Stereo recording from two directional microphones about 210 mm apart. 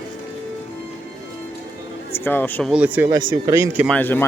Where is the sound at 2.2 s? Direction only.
10° left (ahead or behind).